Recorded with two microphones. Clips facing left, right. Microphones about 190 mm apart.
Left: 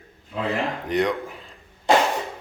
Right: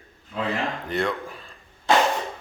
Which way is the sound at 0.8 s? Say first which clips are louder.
Left 5 dB; 15° left (ahead or behind).